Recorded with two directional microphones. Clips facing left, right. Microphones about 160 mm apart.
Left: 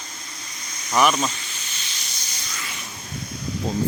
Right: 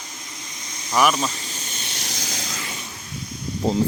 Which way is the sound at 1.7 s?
50° right (ahead or behind).